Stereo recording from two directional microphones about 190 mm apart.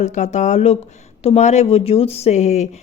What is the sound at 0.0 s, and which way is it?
Speech, 40° left (ahead or behind).